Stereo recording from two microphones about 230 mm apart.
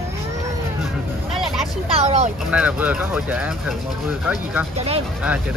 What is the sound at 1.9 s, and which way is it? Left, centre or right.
Vehicle, right.